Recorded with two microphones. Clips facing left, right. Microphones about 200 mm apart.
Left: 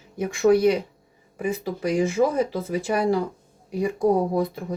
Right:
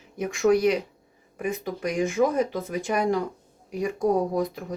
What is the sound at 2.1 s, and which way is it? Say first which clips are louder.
Speech: left 1 dB; 5° left (ahead or behind).